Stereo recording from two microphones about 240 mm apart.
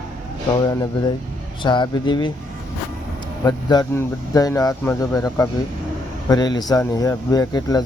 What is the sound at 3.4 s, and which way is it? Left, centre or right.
Speech, centre.